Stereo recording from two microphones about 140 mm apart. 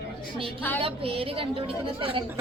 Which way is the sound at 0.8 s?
40° right (ahead or behind).